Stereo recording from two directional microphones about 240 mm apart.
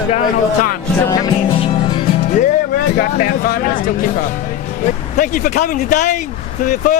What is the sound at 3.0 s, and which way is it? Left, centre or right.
Speech, left.